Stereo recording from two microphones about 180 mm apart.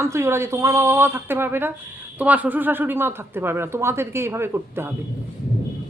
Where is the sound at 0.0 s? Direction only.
15° right (ahead or behind).